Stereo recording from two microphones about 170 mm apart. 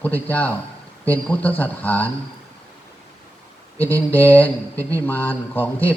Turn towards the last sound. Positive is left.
turn(degrees=10)  # may be behind; listen again after turning